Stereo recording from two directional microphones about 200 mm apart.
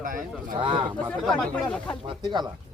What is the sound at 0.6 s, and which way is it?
Speech, 25° right (ahead or behind).